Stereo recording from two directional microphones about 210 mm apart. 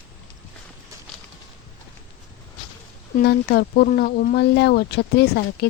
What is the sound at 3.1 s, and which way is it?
Speech, 50° left (ahead or behind).